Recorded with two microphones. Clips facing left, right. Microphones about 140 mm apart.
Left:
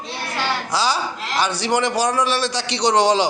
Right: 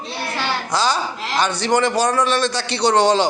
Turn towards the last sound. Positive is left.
turn(degrees=10)  # may be behind; listen again after turning